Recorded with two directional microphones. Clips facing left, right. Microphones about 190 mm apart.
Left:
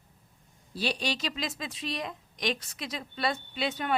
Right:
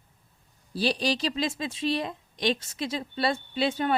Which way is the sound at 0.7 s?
35° right (ahead or behind).